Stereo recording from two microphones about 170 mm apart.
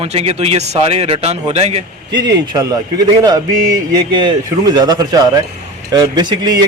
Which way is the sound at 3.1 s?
25° right (ahead or behind).